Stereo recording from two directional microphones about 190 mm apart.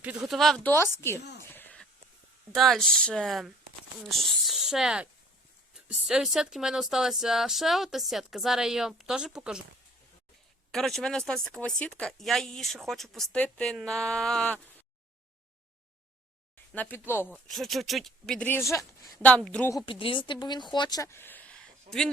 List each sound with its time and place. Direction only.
0.0 s speech: 5° right (ahead or behind); by 1.2 s 10° left (ahead or behind)
1.4 s a sound: 10° left (ahead or behind)
2.6 s speech: centre (ahead or behind)
6.1 s speech: 5° right (ahead or behind)
10.7 s speech: centre (ahead or behind)
16.7 s speech: 10° left (ahead or behind)
19.7 s speech: 25° left (ahead or behind)
20.7 s a sound: 20° left (ahead or behind); by 22.1 s 5° left (ahead or behind)